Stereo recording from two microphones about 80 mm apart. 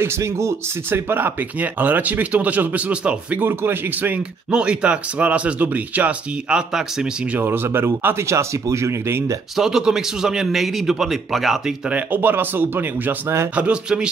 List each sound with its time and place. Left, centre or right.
0.0 s speech: right; by 3.4 s centre
3.4 s speech: right
4.5 s speech: centre; by 9.4 s right
9.6 s a man's voice: centre
11.9 s speech: right
13.6 s speech: centre